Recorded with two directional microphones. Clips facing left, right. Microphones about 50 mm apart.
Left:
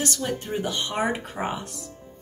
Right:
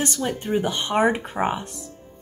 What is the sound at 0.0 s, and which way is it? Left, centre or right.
A woman's voice, right.